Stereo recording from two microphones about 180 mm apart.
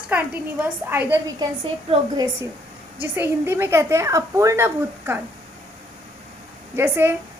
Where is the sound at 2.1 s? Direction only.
20° right (ahead or behind).